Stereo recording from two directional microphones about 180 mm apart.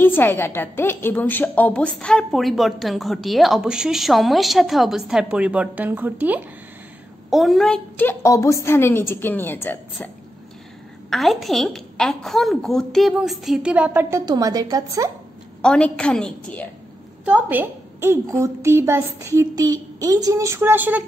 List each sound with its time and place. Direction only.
0.0 s a woman's voice: 10° left (ahead or behind)
11.1 s a woman's voice: centre (ahead or behind)
14.2 s a woman's voice: 20° right (ahead or behind)
15.6 s a woman's voice: 5° left (ahead or behind)
17.2 s a woman's voice: 10° right (ahead or behind)